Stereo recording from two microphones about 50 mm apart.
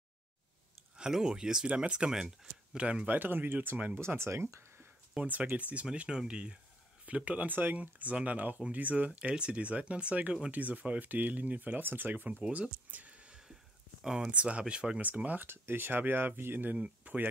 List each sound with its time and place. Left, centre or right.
0.9 s speech: centre
3.1 s speech: right
4.0 s speech: right
5.2 s speech: right
6.0 s speech: centre
7.2 s speech: right
12.9 s a sound: right
14.0 s speech: centre
15.0 s speech: right
15.4 s speech: right
16.7 s speech: right